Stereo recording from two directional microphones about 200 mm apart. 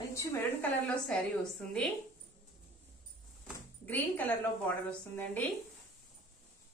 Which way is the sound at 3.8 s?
10° left (ahead or behind).